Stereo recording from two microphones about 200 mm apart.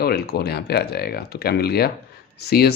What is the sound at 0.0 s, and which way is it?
Speech, 55° left (ahead or behind).